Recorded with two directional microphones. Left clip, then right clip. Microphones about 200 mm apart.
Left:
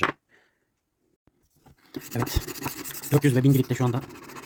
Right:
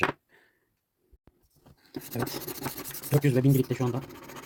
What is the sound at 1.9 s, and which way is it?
Speech, 30° left (ahead or behind).